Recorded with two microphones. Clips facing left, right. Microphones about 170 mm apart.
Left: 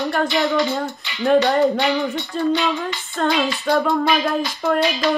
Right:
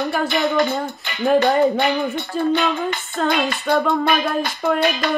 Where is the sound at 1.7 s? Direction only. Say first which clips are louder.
Even; 55° right (ahead or behind).